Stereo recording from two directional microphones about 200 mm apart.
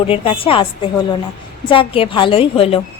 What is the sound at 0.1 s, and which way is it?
A woman's voice, 25° left (ahead or behind).